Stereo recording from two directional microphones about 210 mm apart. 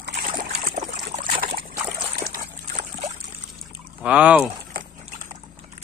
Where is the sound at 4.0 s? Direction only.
5° right (ahead or behind).